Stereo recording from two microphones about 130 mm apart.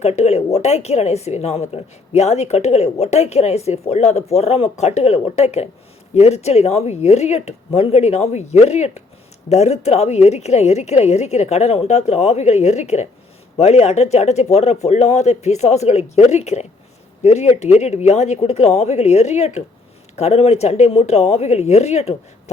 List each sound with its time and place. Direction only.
0.0 s speech: 55° left (ahead or behind)